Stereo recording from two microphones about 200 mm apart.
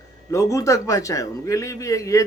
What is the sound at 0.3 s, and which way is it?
A man's voice, 15° left (ahead or behind).